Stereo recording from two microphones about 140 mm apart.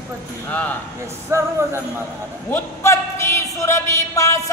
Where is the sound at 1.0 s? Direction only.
20° right (ahead or behind).